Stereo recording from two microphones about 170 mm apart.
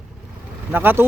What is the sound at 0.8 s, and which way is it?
Speech, 10° right (ahead or behind).